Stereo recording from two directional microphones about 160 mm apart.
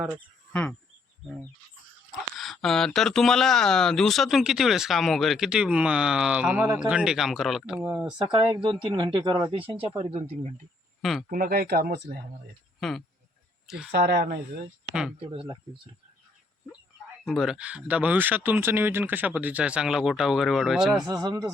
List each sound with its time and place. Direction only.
0.5 s a sound: 5° left (ahead or behind)
2.4 s speech: centre (ahead or behind)
8.3 s speech: 30° right (ahead or behind)
11.0 s speech: centre (ahead or behind)
11.3 s speech: 70° right (ahead or behind)
13.7 s speech: 5° right (ahead or behind)
13.9 s speech: 90° right
15.2 s speech: 35° right (ahead or behind)
17.2 s speech: centre (ahead or behind)
21.1 s speech: 25° right (ahead or behind)